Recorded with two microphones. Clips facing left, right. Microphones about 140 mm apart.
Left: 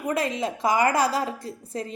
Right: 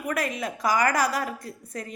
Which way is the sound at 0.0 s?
25° left (ahead or behind).